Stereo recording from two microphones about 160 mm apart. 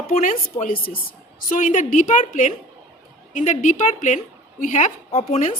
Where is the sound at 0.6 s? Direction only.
65° left (ahead or behind).